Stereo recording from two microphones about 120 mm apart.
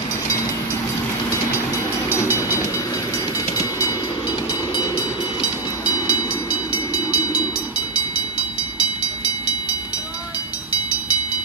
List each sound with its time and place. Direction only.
5.9 s train: 30° left (ahead or behind)